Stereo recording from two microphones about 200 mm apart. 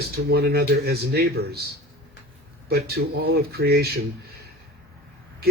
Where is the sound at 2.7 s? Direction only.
50° right (ahead or behind).